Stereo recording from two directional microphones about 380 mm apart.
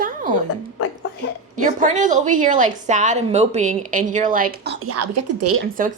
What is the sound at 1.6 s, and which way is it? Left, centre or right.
A woman's voice, centre.